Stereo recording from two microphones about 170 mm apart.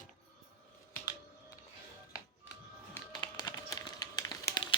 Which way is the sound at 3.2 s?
25° left (ahead or behind).